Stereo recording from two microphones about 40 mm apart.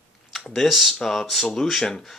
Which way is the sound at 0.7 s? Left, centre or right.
Centre.